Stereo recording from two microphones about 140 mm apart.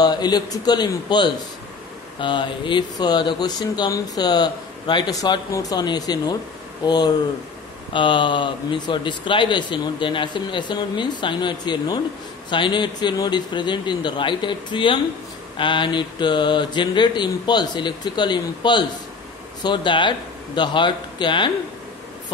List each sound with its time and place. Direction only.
0.0 s speech: 30° left (ahead or behind)